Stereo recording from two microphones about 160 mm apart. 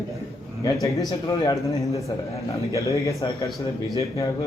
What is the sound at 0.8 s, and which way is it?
Speech, 25° left (ahead or behind).